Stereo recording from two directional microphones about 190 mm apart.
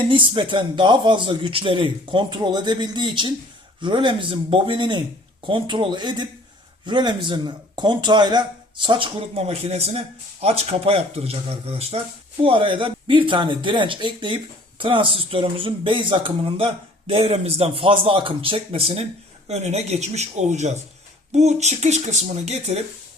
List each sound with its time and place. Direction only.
0.0 s speech: 25° right (ahead or behind)